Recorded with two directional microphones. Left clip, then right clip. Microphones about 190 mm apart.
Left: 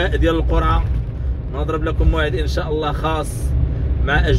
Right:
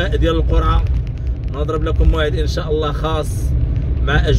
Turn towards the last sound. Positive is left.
turn(degrees=-25)  # may be behind; listen again after turning